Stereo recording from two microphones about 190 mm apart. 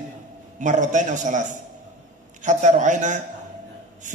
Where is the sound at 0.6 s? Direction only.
40° right (ahead or behind).